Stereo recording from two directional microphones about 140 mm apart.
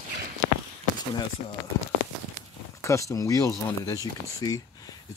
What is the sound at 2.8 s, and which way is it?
Speech, 20° left (ahead or behind).